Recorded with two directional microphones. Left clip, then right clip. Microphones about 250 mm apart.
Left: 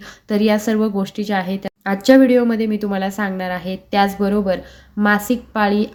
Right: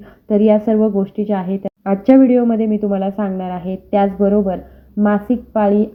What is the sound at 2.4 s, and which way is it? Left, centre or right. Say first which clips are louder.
Speech: right 2 dB; left.